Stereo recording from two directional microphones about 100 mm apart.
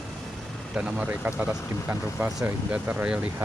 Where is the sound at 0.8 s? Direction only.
10° right (ahead or behind).